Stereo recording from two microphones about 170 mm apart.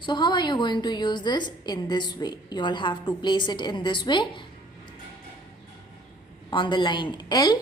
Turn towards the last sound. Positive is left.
turn(degrees=25)  # may be behind; listen again after turning